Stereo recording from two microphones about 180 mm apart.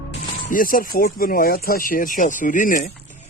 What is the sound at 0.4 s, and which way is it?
Speech, 50° left (ahead or behind).